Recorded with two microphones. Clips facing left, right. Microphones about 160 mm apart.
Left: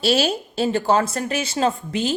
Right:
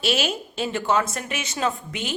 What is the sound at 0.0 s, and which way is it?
A woman's voice, 35° left (ahead or behind).